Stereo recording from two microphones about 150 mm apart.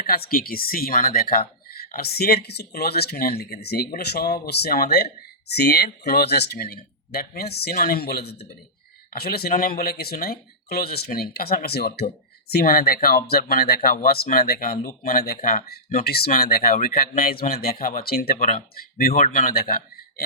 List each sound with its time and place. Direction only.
0.0 s speech: 90° left